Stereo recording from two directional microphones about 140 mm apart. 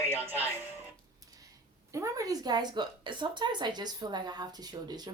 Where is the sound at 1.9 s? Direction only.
25° right (ahead or behind).